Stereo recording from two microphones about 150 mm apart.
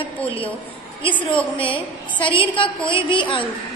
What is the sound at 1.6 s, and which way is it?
A woman's voice, 35° left (ahead or behind).